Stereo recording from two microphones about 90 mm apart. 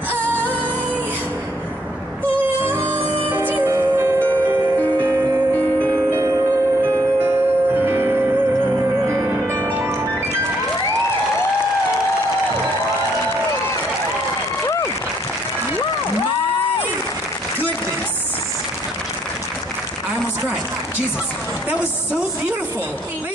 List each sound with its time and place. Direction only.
2.3 s music: 20° right (ahead or behind)
4.8 s music: 20° left (ahead or behind)
7.2 s music: 25° right (ahead or behind)